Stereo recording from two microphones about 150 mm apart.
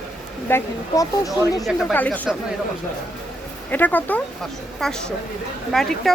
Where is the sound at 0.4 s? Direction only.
20° left (ahead or behind).